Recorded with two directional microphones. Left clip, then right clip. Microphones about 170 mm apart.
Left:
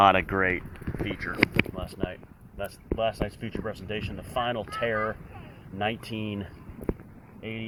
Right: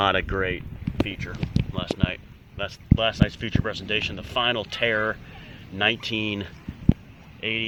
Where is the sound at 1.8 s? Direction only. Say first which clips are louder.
Right 6 dB; 20° left (ahead or behind).